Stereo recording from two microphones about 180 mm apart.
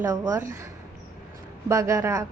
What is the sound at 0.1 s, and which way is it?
A woman's voice, 20° right (ahead or behind).